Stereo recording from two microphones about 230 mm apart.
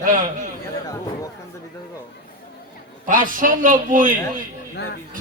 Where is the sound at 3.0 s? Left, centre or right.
Right.